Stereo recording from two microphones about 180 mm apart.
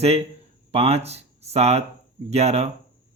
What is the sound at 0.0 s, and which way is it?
Speech, 35° right (ahead or behind).